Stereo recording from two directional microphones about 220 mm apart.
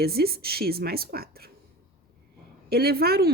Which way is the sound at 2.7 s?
45° right (ahead or behind).